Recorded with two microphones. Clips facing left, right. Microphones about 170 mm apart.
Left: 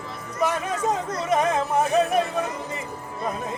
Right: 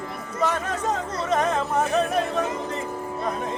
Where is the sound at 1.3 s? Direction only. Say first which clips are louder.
Left 1 dB; 10° left (ahead or behind).